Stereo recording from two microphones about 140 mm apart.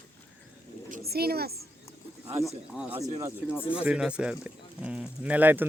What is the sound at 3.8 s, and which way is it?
Speech, 10° right (ahead or behind).